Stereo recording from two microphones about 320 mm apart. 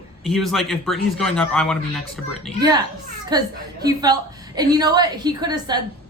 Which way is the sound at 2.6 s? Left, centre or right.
Centre.